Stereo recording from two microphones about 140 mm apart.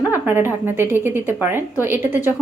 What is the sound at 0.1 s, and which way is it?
A woman's voice, 15° right (ahead or behind).